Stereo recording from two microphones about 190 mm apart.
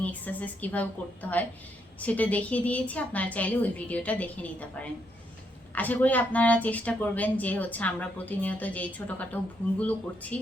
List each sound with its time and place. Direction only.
0.0 s a woman's voice: 10° left (ahead or behind)